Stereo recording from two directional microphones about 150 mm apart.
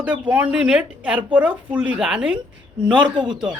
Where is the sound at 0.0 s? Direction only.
10° right (ahead or behind).